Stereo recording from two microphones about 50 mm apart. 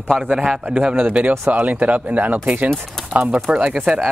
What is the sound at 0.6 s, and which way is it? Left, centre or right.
Speech, right.